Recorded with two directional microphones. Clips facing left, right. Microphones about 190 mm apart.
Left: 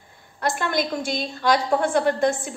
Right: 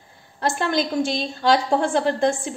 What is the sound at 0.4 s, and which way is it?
A woman's voice, 30° right (ahead or behind).